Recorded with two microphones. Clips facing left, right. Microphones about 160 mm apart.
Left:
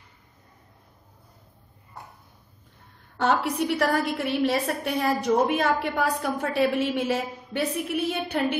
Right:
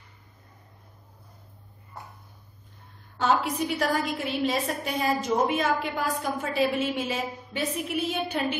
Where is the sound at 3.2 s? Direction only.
65° left (ahead or behind).